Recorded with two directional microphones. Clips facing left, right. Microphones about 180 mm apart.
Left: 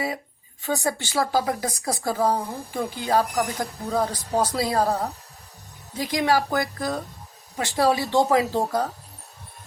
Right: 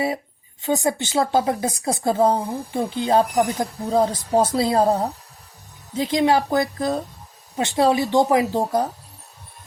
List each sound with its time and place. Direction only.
0.6 s speech: 20° right (ahead or behind)